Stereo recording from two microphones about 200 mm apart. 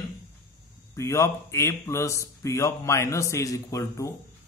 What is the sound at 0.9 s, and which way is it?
A man's voice, 15° left (ahead or behind).